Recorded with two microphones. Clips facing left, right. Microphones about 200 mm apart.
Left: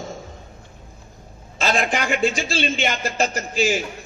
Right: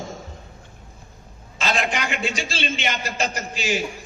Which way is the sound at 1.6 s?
45° left (ahead or behind).